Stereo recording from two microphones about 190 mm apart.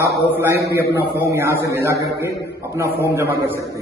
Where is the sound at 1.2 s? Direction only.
15° right (ahead or behind).